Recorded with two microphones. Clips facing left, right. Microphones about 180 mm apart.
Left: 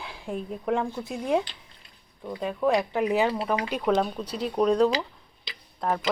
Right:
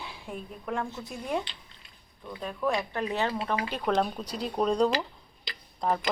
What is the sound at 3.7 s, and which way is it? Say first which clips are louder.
Speech: left 3 dB; centre (ahead or behind).